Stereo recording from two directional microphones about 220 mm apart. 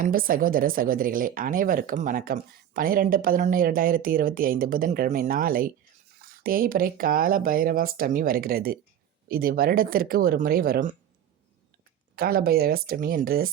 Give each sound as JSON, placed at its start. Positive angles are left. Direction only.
{"t": 0.0, "sound": "speech", "side_deg": -40}
{"t": 12.1, "sound": "speech", "side_deg": -45}